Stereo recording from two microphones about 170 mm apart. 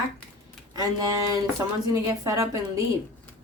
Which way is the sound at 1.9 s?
20° right (ahead or behind).